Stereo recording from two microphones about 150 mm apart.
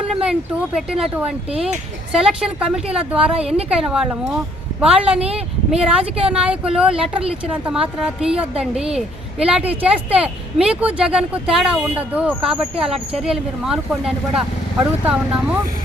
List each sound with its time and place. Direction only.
0.1 s speech: 5° right (ahead or behind)
2.1 s speech: 5° right (ahead or behind)
3.3 s a woman's voice: 40° right (ahead or behind)
3.7 s speech: 5° right (ahead or behind)